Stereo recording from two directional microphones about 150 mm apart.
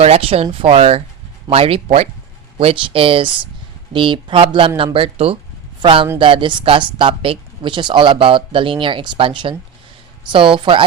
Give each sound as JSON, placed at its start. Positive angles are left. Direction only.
{"t": 0.0, "sound": "speech", "side_deg": -40}